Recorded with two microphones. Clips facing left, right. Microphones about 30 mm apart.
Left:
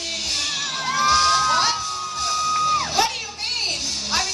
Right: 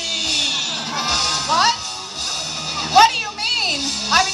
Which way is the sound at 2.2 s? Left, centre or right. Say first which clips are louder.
Left 6 dB; right.